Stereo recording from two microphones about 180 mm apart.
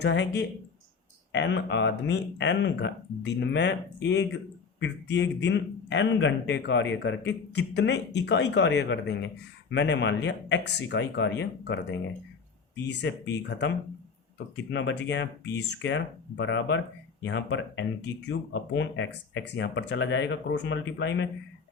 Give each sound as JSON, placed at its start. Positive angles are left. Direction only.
{"t": 0.0, "sound": "speech", "side_deg": 75}
{"t": 1.3, "sound": "a man's voice", "side_deg": 85}
{"t": 4.8, "sound": "a man's voice", "side_deg": 90}
{"t": 14.5, "sound": "a man's voice", "side_deg": 85}